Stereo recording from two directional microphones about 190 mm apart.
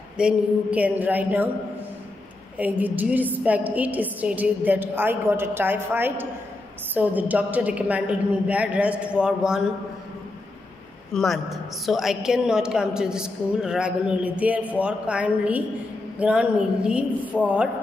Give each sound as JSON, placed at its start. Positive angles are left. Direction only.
{"t": 0.2, "sound": "a woman's voice", "side_deg": -5}
{"t": 2.5, "sound": "a woman's voice", "side_deg": -10}
{"t": 11.1, "sound": "a woman's voice", "side_deg": 0}